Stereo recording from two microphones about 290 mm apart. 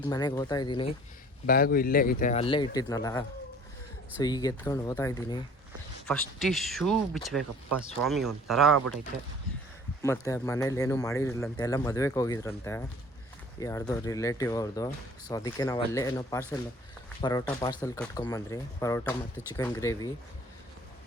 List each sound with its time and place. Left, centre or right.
0.0 s speech: centre
1.5 s speech: left; by 5.4 s centre
6.1 s speech: centre
10.0 s speech: centre